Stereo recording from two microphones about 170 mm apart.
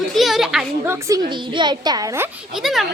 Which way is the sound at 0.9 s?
20° right (ahead or behind).